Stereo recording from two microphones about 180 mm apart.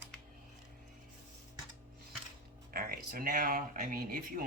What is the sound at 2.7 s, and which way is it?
Speech, 55° right (ahead or behind).